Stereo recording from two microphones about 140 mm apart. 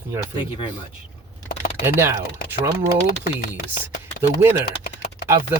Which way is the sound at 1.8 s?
15° right (ahead or behind).